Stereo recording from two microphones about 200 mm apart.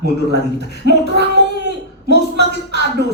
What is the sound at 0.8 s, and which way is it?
Speech, 55° right (ahead or behind).